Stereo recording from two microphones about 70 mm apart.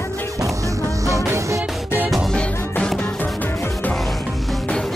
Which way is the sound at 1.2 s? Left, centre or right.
Right.